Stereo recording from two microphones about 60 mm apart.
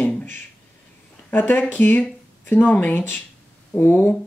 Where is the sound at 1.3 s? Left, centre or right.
Left.